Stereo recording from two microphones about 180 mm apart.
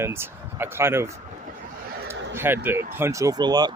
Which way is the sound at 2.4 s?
10° right (ahead or behind).